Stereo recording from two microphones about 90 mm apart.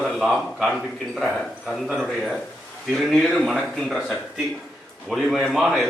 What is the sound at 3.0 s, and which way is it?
A man's voice, 5° left (ahead or behind).